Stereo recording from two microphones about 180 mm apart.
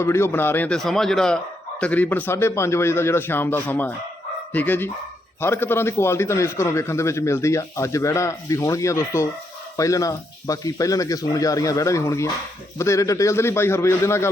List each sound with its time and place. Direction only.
0.0 s a man's voice: 15° left (ahead or behind)